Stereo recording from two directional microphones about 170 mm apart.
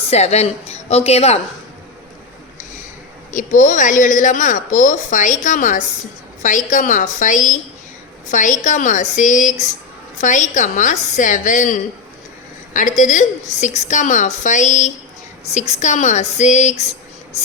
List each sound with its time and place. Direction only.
0.1 s a woman's voice: 40° left (ahead or behind)
3.3 s a woman's voice: 50° left (ahead or behind)